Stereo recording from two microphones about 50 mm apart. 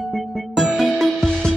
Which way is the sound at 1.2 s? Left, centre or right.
Centre.